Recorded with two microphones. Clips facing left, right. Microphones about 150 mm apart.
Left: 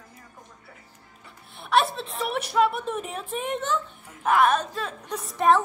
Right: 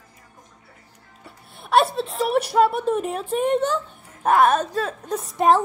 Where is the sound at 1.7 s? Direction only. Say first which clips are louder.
Right 4 dB; 35° right (ahead or behind).